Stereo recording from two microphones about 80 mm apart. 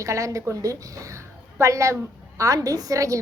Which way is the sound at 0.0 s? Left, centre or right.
Right.